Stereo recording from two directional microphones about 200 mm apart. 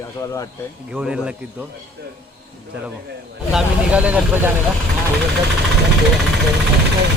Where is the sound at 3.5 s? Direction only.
5° right (ahead or behind).